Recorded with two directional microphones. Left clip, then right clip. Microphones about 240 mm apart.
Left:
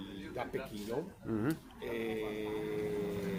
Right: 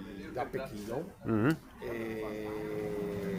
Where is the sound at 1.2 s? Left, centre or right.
Right.